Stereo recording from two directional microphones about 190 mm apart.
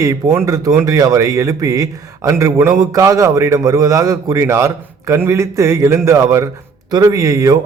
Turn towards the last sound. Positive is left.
turn(degrees=-15)  # may be behind; listen again after turning